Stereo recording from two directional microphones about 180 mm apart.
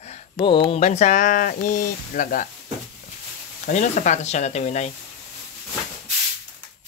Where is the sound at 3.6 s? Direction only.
45° left (ahead or behind).